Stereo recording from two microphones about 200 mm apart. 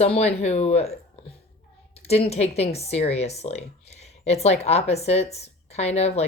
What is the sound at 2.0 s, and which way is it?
A woman's voice, 30° left (ahead or behind).